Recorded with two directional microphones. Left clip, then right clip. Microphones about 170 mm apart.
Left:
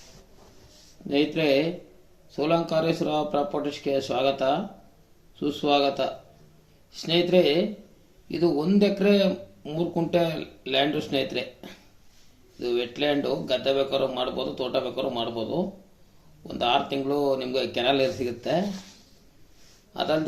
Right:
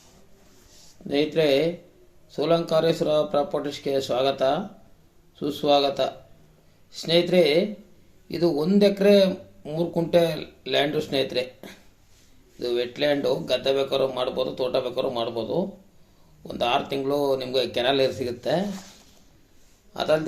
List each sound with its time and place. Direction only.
1.0 s speech: 35° right (ahead or behind)
19.9 s a man's voice: 35° right (ahead or behind)